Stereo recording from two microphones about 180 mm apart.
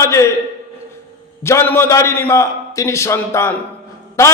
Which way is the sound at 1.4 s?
15° left (ahead or behind).